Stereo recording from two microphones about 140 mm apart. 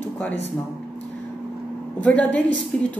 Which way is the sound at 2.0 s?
10° left (ahead or behind).